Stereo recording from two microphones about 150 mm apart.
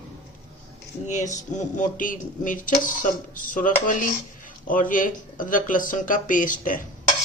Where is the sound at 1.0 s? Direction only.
55° left (ahead or behind).